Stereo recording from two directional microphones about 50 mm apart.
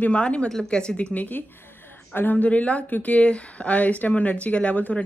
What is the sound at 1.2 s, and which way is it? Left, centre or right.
Speech, left.